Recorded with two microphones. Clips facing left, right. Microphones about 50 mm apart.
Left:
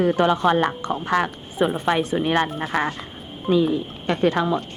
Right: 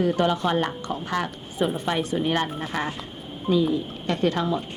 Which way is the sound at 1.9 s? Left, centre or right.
Left.